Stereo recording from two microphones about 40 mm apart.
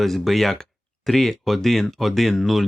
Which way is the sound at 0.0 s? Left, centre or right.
Centre.